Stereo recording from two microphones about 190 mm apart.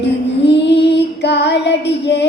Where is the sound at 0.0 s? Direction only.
65° left (ahead or behind).